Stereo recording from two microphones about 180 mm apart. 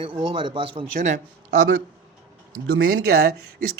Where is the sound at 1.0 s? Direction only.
50° right (ahead or behind).